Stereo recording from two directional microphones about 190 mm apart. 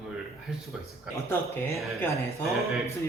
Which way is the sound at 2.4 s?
Centre (ahead or behind).